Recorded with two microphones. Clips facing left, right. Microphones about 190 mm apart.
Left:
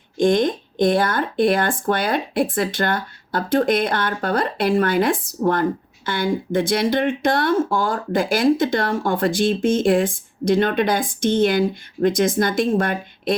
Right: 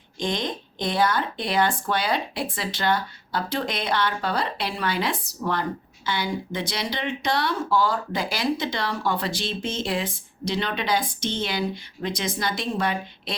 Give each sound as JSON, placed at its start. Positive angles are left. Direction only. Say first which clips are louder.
{"t": 0.2, "sound": "speech", "louder": "left 11 dB", "side_deg": 50}